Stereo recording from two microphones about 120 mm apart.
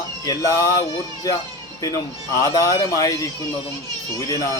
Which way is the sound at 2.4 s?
30° left (ahead or behind).